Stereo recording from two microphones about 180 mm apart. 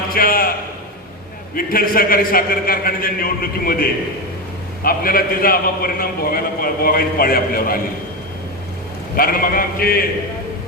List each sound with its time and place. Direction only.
0.1 s a sound: 55° left (ahead or behind)
1.5 s a man's voice: 55° left (ahead or behind)
9.1 s a man's voice: 55° left (ahead or behind)